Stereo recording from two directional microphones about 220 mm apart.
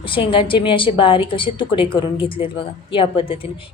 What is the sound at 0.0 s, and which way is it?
A woman's voice, 25° left (ahead or behind).